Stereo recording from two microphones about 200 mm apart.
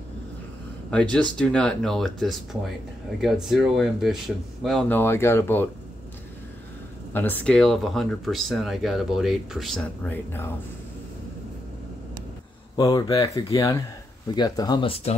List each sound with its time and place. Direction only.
1.4 s speech: 5° left (ahead or behind)
7.1 s speech: 10° left (ahead or behind)
12.7 s speech: 20° left (ahead or behind)